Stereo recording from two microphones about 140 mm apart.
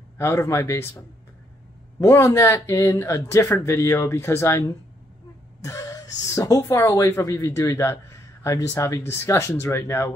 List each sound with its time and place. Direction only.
0.2 s speech: 20° left (ahead or behind)
2.0 s speech: 20° left (ahead or behind)